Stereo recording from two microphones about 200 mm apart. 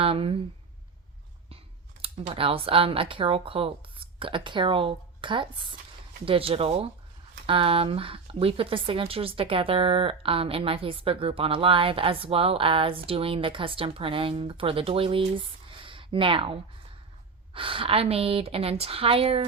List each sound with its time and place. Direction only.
0.0 s speech: 30° right (ahead or behind)
2.0 s speech: 30° right (ahead or behind)